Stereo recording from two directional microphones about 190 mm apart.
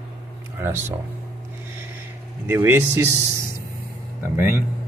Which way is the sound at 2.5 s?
15° right (ahead or behind).